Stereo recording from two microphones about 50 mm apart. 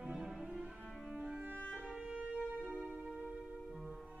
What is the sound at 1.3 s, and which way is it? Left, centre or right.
Music, right.